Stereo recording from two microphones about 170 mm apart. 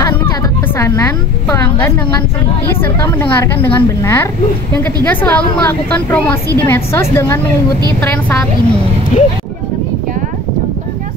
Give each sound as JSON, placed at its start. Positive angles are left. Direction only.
{"t": 0.7, "sound": "a woman's voice", "side_deg": 15}
{"t": 9.1, "sound": "speech", "side_deg": 45}